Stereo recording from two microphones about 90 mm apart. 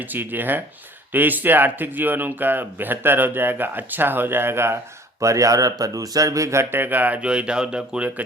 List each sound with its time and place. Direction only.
0.0 s speech: 20° right (ahead or behind)